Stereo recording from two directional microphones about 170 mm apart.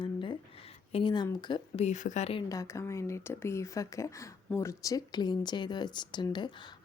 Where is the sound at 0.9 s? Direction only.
25° left (ahead or behind).